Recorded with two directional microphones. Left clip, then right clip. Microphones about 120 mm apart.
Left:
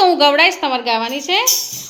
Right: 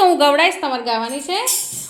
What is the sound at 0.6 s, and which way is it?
Speech, 15° left (ahead or behind).